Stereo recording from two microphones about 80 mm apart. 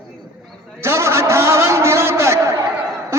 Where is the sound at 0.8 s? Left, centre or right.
Right.